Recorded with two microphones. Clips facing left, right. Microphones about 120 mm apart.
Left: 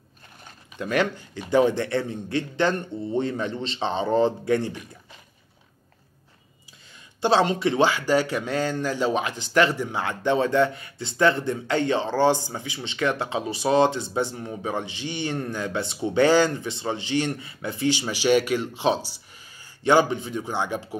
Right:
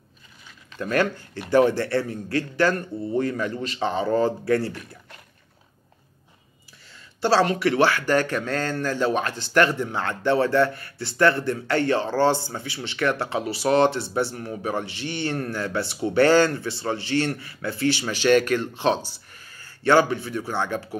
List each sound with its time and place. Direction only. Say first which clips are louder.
0.9 s speech: right 1 dB; 15° left (ahead or behind)
7.2 s speech: even; 20° left (ahead or behind)